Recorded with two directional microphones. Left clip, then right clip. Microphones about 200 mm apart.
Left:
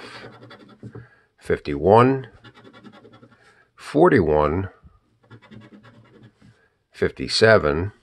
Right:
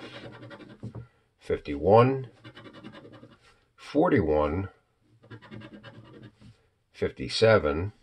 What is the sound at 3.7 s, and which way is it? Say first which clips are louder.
Speech: left 8 dB; 55° left (ahead or behind).